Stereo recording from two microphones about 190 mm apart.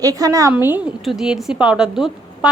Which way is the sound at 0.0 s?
20° right (ahead or behind).